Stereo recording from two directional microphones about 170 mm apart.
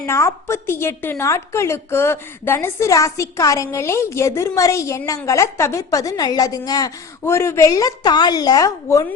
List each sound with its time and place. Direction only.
0.0 s a woman's voice: 15° left (ahead or behind)